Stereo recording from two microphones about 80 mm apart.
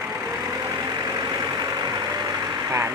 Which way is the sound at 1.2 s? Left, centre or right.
Right.